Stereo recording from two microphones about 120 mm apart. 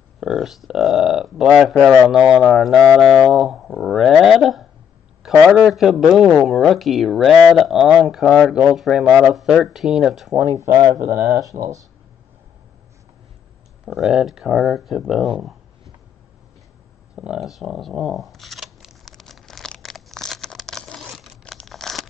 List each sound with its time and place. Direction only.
0.2 s speech: 5° right (ahead or behind)
10.6 s speech: 30° right (ahead or behind)
13.8 s speech: 5° right (ahead or behind)
17.1 s shuffling cards: 10° right (ahead or behind)